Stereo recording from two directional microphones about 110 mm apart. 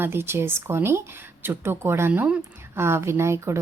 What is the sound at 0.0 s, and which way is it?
Speech, 20° right (ahead or behind).